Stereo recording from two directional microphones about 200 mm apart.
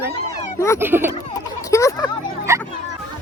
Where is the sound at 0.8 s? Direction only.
10° right (ahead or behind).